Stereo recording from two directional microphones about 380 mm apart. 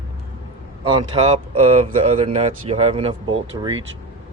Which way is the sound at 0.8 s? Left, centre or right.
Centre.